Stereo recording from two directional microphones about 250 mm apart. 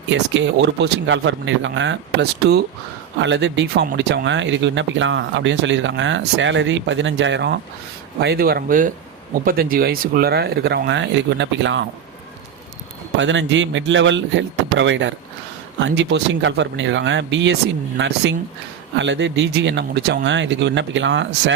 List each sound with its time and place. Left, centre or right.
0.1 s speech: right
13.1 s speech: right